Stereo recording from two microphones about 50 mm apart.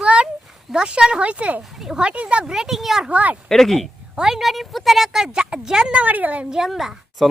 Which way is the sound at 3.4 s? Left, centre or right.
Centre.